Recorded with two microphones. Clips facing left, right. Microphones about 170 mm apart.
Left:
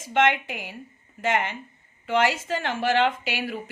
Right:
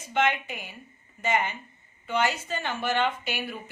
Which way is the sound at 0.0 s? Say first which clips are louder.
Left 4 dB; 90° left.